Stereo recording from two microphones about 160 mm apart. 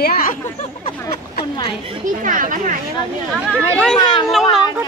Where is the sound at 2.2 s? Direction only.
55° right (ahead or behind).